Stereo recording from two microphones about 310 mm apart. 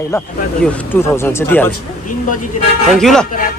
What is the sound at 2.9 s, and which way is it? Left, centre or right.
Speech, centre.